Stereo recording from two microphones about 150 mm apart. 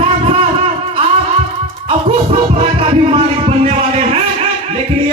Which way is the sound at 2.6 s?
40° right (ahead or behind).